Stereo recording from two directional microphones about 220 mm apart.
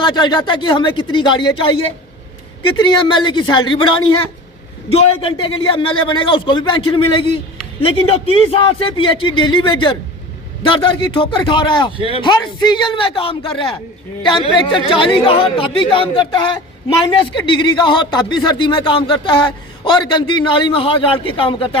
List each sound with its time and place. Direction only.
0.0 s speech: 20° left (ahead or behind)
11.9 s speech: 25° right (ahead or behind)
12.2 s speech: 20° left (ahead or behind)
14.5 s speech: 20° left (ahead or behind)